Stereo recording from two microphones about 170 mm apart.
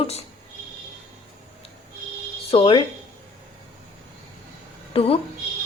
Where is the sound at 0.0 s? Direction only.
35° left (ahead or behind).